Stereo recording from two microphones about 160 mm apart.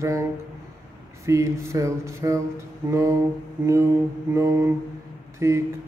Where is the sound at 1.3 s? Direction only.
20° right (ahead or behind).